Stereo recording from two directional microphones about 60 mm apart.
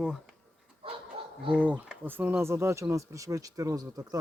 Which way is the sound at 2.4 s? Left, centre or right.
Right.